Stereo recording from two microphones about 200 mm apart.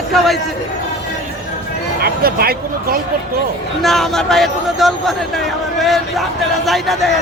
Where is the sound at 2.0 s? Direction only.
50° right (ahead or behind).